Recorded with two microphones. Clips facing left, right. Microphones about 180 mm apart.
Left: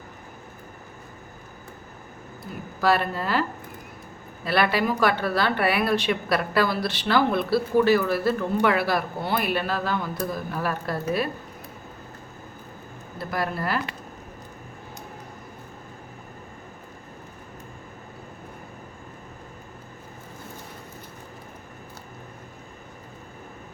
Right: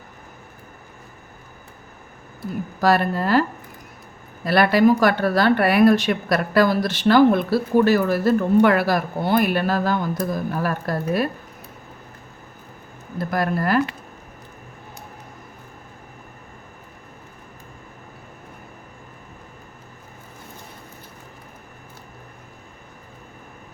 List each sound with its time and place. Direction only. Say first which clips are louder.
2.8 s speech: right 4 dB; 40° right (ahead or behind)
4.4 s speech: right 7 dB; 45° right (ahead or behind)
13.1 s speech: right 5 dB; 45° right (ahead or behind)